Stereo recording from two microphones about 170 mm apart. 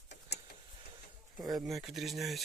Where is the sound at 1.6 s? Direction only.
Centre (ahead or behind).